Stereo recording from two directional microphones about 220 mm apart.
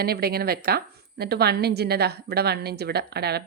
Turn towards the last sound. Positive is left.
turn(degrees=-45)  # may be behind; listen again after turning